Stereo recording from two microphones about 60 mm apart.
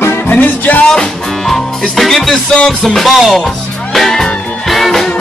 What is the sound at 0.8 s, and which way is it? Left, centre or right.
Music, centre.